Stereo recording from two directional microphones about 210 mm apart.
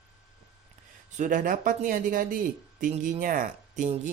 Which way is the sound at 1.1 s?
35° right (ahead or behind).